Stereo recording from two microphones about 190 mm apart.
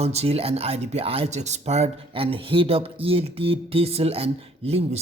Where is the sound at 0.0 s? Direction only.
35° right (ahead or behind).